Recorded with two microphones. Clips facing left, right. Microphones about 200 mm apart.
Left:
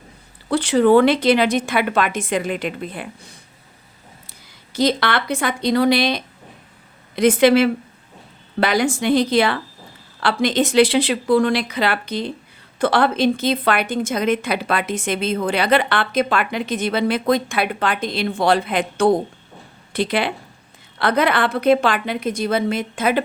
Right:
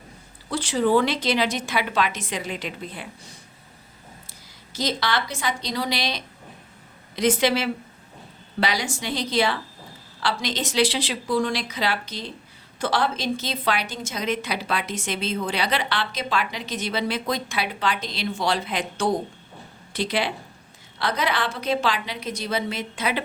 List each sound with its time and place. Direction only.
0.5 s a woman's voice: 60° left (ahead or behind)
4.7 s a woman's voice: 60° left (ahead or behind)